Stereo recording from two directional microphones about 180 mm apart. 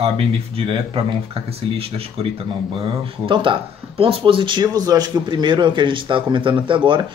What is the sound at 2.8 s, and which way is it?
Speech, 30° right (ahead or behind).